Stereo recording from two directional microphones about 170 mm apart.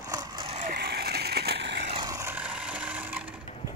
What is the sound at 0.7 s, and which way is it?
Vehicle, 70° right (ahead or behind).